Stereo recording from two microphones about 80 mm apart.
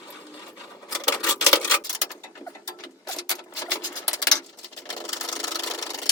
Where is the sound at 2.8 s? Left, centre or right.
Left.